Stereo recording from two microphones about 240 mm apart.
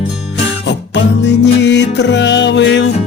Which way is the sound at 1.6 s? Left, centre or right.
Left.